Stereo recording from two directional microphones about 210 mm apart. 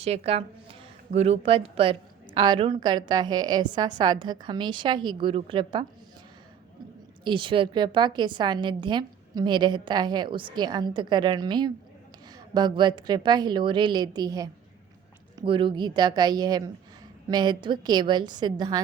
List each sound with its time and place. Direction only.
0.0 s a woman's voice: 30° right (ahead or behind)
7.3 s a woman's voice: 25° right (ahead or behind)